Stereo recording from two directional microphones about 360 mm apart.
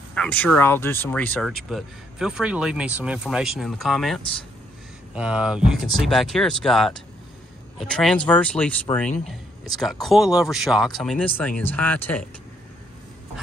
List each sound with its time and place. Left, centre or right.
0.1 s speech: centre